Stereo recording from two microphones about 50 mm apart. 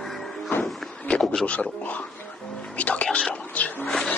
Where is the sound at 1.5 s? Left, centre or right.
Left.